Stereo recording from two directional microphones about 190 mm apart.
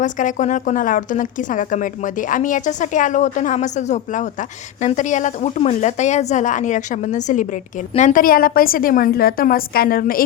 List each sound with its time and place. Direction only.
0.0 s speech: 40° left (ahead or behind)